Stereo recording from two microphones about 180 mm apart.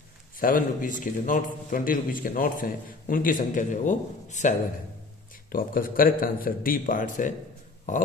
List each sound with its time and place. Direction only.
0.4 s a man's voice: 50° left (ahead or behind)